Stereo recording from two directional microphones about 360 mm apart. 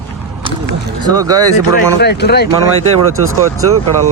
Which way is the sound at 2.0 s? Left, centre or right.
Left.